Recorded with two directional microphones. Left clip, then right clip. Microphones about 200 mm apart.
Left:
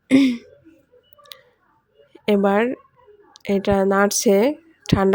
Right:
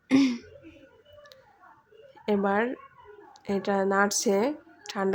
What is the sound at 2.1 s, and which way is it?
Speech, 40° left (ahead or behind).